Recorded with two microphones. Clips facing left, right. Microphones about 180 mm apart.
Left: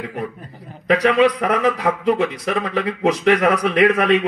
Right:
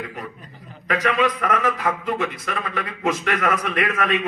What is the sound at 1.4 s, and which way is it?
A man's voice, 35° left (ahead or behind).